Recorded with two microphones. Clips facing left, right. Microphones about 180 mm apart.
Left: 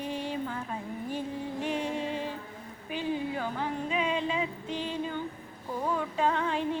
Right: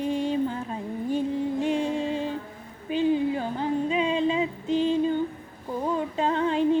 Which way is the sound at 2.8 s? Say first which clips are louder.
Right 9 dB; 25° right (ahead or behind).